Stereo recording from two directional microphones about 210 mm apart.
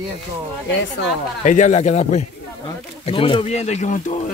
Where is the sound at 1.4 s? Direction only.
35° left (ahead or behind).